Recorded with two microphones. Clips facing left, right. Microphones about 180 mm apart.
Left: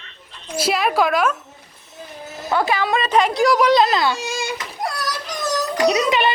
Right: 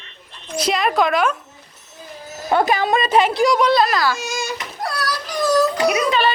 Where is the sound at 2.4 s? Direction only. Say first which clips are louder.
Right 3 dB; 25° right (ahead or behind).